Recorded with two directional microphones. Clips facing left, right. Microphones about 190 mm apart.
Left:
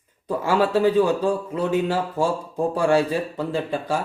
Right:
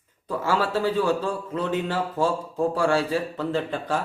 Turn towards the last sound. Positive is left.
turn(degrees=10)  # may be behind; listen again after turning